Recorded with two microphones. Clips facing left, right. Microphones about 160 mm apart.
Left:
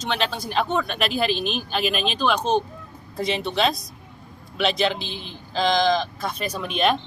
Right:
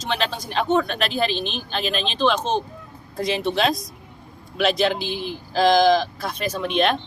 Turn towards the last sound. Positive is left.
turn(degrees=0)  # may be behind; listen again after turning